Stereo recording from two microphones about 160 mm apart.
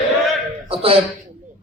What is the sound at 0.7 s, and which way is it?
Speech, 35° right (ahead or behind).